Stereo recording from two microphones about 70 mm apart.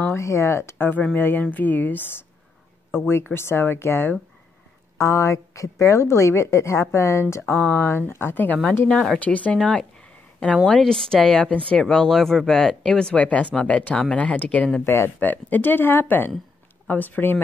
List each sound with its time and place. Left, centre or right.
0.1 s a woman's voice: left
4.9 s a woman's voice: left
9.6 s a woman's voice: centre; by 17.4 s left